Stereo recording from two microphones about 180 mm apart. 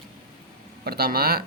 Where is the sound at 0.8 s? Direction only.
60° right (ahead or behind).